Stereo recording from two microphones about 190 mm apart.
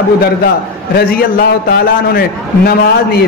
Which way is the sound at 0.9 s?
55° left (ahead or behind).